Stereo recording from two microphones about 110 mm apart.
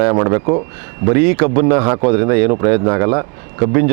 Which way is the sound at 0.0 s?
30° right (ahead or behind).